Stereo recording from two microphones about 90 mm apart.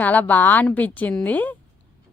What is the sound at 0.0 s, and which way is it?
A woman's voice, 20° left (ahead or behind).